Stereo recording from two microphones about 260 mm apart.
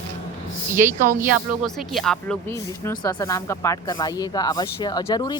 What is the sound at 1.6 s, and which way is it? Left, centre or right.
Speech, centre.